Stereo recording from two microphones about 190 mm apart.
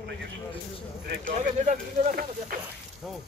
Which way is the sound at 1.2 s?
45° right (ahead or behind).